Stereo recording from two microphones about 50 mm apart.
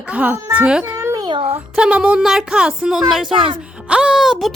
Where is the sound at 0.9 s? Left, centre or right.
Right.